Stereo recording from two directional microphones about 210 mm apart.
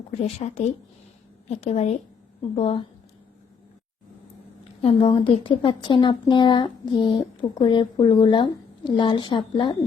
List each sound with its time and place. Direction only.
0.2 s a woman's voice: 30° left (ahead or behind)
4.8 s speech: 25° left (ahead or behind)